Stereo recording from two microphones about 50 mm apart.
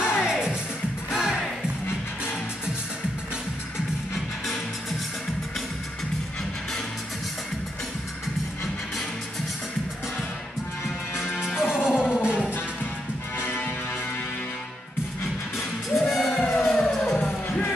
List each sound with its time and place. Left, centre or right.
0.0 s music: left
0.3 s music: centre
11.4 s music: centre
13.4 s music: left
16.1 s music: centre